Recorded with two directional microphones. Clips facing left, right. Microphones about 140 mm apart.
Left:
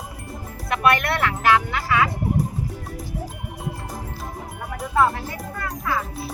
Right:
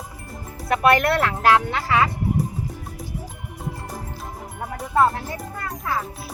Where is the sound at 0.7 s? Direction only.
40° right (ahead or behind).